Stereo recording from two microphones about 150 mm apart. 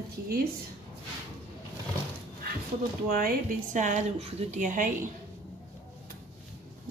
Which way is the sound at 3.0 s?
75° right (ahead or behind).